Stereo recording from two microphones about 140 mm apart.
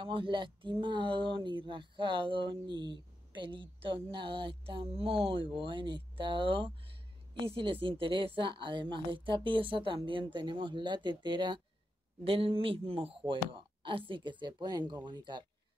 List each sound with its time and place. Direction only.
0.0 s speech: 35° right (ahead or behind)